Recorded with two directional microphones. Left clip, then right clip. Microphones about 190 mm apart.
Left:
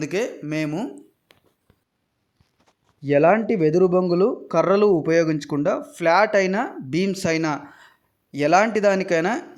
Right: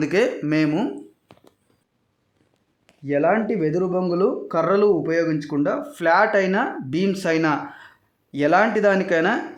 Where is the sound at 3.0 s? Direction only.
40° left (ahead or behind).